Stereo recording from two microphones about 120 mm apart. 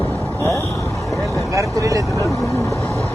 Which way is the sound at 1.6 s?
25° right (ahead or behind).